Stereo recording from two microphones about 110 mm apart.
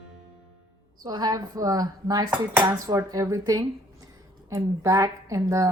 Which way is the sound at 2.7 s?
25° right (ahead or behind).